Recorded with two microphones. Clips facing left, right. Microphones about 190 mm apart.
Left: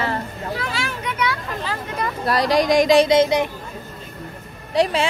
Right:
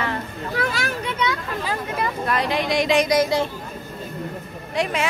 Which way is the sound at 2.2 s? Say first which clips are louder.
Left 7 dB; 35° left (ahead or behind).